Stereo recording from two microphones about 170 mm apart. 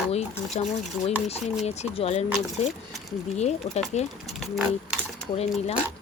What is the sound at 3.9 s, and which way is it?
Speech, 40° left (ahead or behind).